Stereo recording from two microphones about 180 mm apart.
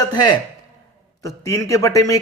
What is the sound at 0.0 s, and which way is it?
Speech, 25° left (ahead or behind).